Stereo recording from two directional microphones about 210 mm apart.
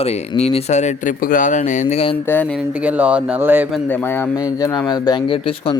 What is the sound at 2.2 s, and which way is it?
Speech, 10° left (ahead or behind).